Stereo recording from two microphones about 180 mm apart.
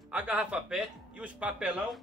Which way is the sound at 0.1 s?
10° right (ahead or behind).